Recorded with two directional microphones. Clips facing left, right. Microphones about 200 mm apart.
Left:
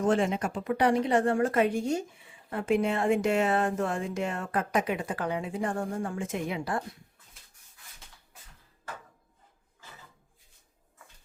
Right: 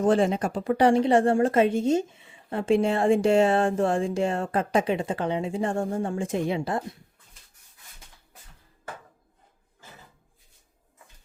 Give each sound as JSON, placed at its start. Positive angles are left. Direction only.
{"t": 0.0, "sound": "speech", "side_deg": -35}